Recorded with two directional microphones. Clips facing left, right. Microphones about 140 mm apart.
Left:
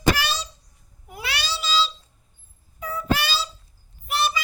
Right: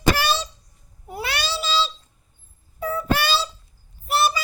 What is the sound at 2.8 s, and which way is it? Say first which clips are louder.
Music: right 5 dB; 40° right (ahead or behind).